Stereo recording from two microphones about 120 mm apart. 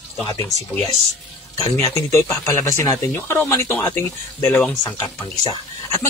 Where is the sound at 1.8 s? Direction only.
25° left (ahead or behind).